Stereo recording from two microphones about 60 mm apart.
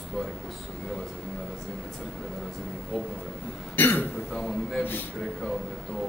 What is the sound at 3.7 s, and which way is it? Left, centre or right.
Speech, left.